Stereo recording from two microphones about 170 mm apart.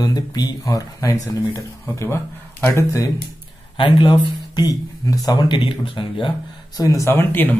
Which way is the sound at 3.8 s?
30° left (ahead or behind).